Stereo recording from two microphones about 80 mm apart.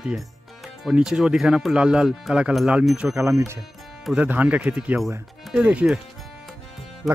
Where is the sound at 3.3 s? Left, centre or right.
Right.